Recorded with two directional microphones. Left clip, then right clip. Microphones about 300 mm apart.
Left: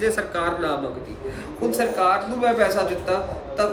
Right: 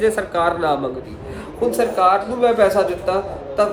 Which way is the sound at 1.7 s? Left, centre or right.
Centre.